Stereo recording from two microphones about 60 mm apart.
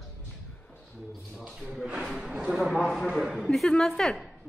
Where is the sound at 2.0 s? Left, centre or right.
Centre.